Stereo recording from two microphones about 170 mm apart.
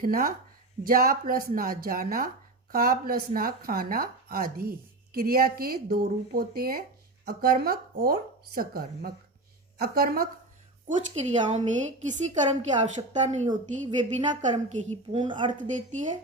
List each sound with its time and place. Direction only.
0.0 s speech: 60° right (ahead or behind)
10.8 s a woman's voice: 45° right (ahead or behind)
15.1 s a woman's voice: 30° right (ahead or behind)
15.5 s a woman's voice: 45° right (ahead or behind)